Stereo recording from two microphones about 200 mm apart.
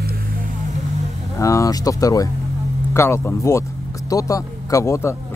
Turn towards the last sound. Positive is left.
turn(degrees=15)  # may be behind; listen again after turning